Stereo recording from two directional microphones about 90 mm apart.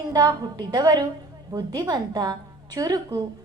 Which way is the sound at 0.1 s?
50° right (ahead or behind).